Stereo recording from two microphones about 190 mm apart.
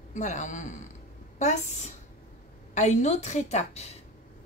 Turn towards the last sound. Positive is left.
turn(degrees=35)  # may be behind; listen again after turning